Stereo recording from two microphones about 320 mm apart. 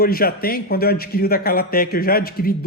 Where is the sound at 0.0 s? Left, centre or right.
Left.